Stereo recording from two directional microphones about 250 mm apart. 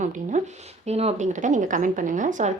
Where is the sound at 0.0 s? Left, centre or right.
Right.